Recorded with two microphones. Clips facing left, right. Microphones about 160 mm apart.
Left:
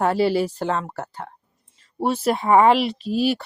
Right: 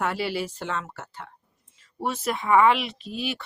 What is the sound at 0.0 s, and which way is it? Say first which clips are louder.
Speech: left 8 dB; 35° left (ahead or behind).